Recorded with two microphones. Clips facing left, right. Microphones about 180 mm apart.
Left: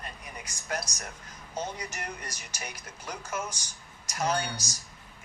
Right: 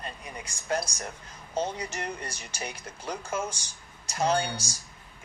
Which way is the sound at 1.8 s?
30° right (ahead or behind).